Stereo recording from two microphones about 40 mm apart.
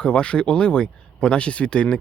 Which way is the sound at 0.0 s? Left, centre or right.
Left.